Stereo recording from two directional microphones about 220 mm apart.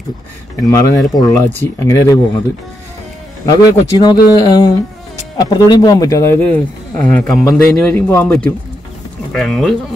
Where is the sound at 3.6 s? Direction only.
20° left (ahead or behind).